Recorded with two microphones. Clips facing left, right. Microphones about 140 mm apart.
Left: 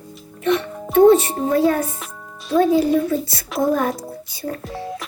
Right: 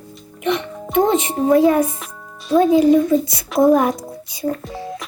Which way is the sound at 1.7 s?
Centre (ahead or behind).